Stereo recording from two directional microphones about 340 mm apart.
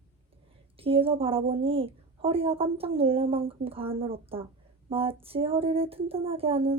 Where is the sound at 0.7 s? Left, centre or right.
Centre.